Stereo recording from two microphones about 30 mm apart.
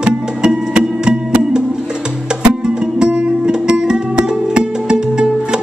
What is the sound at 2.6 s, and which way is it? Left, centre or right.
Music, right.